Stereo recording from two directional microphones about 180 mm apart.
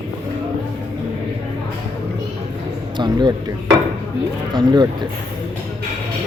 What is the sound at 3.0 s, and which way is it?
Speech, 25° right (ahead or behind).